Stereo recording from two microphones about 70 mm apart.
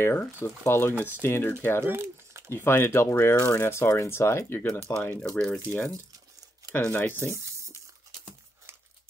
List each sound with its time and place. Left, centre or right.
0.0 s speech: left
0.9 s speech: right
1.2 s speech: left
1.9 s crumpling: right
2.5 s speech: left
5.2 s speech: centre
5.7 s speech: left
7.3 s a sound: right